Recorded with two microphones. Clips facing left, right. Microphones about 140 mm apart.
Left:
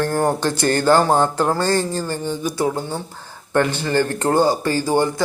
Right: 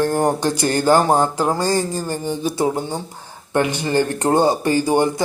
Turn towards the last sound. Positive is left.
turn(degrees=-15)  # may be behind; listen again after turning